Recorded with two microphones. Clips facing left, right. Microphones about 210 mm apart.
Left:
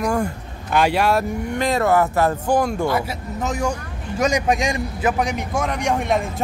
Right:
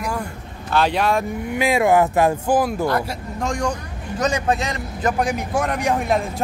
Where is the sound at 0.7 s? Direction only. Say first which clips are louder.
Left 1 dB; 10° left (ahead or behind).